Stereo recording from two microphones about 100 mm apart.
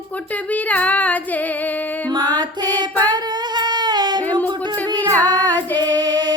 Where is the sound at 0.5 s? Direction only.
15° left (ahead or behind).